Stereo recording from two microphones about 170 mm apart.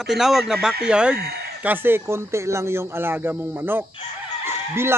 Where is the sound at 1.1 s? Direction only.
65° right (ahead or behind).